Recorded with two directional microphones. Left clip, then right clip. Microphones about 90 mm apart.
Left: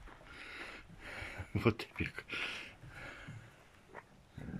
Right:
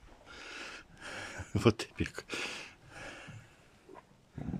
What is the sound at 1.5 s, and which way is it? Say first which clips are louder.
Speech: right 5 dB; 25° right (ahead or behind).